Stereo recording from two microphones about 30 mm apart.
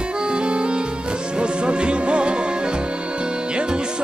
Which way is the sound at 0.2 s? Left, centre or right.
Right.